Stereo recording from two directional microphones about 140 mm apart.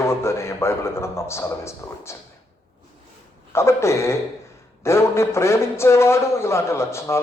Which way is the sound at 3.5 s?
20° left (ahead or behind).